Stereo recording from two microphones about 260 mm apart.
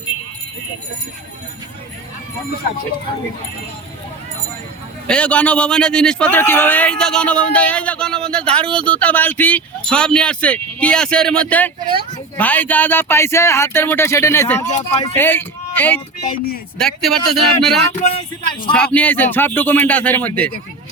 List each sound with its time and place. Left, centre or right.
5.0 s a man's voice: centre
16.2 s speech: left
16.7 s a man's voice: centre
18.0 s speech: left
18.9 s speech: centre